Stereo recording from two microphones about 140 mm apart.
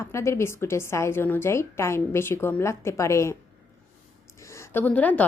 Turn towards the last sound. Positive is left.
turn(degrees=10)  # may be behind; listen again after turning